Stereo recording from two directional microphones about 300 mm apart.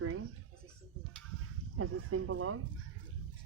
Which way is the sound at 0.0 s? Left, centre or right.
Right.